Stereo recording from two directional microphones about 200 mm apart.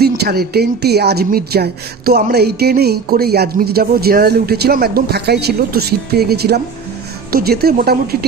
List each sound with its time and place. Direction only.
0.2 s a woman's voice: 50° right (ahead or behind)